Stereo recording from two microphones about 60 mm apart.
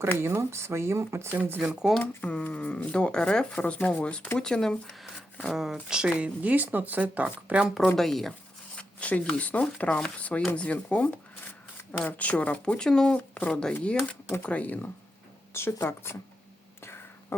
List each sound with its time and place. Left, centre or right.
0.2 s speech: right
1.4 s speech: right
2.0 s speech: left
3.6 s speech: left; by 5.0 s centre
5.5 s speech: centre
6.1 s speech: right
7.9 s speech: centre
8.7 s speech: centre
13.1 s a woman's voice: left
13.5 s speech: centre
14.4 s speech: left
15.5 s speech: left
16.8 s whispering: left